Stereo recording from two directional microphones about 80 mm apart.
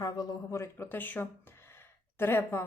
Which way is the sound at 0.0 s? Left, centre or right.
Left.